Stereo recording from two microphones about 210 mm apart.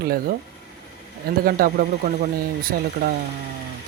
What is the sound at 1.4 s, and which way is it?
Speech, 45° right (ahead or behind).